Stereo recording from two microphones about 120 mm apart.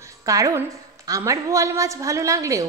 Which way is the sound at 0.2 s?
30° right (ahead or behind).